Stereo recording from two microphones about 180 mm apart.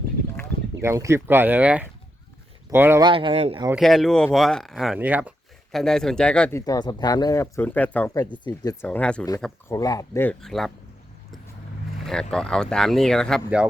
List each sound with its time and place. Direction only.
0.8 s speech: 15° right (ahead or behind)
3.0 s speech: 30° right (ahead or behind)
3.8 s speech: centre (ahead or behind)
5.7 s speech: 5° left (ahead or behind)
6.6 s speech: 20° left (ahead or behind)
8.1 s speech: 20° left (ahead or behind)
8.8 s speech: 5° left (ahead or behind)
10.4 s speech: centre (ahead or behind)
12.0 s speech: 5° left (ahead or behind)